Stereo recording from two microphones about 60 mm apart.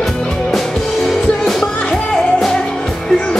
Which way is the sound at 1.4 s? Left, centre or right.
Centre.